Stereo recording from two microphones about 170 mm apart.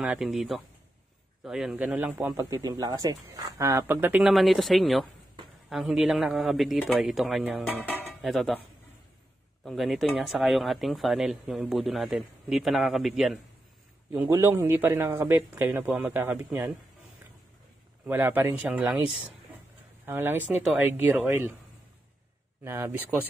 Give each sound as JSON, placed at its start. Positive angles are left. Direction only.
{"t": 0.0, "sound": "a man's voice", "side_deg": -5}
{"t": 4.3, "sound": "speech", "side_deg": 0}
{"t": 9.7, "sound": "speech", "side_deg": 0}
{"t": 14.1, "sound": "a man's voice", "side_deg": -15}
{"t": 18.0, "sound": "a man's voice", "side_deg": -10}
{"t": 22.6, "sound": "a man's voice", "side_deg": -15}